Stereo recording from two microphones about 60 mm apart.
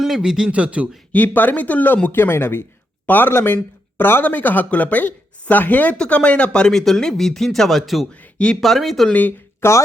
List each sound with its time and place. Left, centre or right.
0.0 s speech: centre
1.1 s speech: left; by 8.0 s centre
8.1 s speech: left
8.6 s speech: centre
9.0 s speech: left
9.6 s speech: left